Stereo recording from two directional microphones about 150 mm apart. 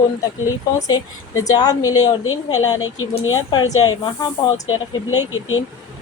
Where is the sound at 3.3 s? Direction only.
25° left (ahead or behind).